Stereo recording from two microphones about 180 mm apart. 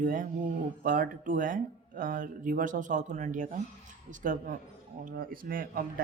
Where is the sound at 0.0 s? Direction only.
50° right (ahead or behind).